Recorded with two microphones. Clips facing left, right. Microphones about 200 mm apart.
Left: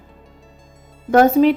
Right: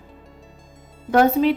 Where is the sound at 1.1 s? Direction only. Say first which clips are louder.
Left 4 dB; 45° left (ahead or behind).